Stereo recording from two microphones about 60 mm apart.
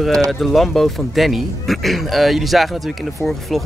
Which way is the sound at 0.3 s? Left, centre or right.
Centre.